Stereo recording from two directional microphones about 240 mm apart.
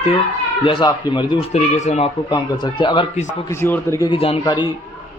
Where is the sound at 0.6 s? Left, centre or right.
Left.